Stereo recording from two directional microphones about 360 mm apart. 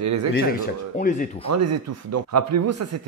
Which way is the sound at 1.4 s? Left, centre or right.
Right.